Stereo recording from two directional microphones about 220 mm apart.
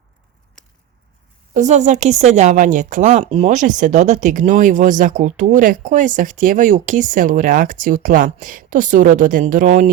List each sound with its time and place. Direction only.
1.5 s a woman's voice: 30° right (ahead or behind)